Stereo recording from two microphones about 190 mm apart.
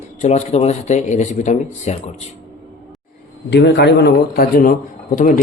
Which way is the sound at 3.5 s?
65° left (ahead or behind).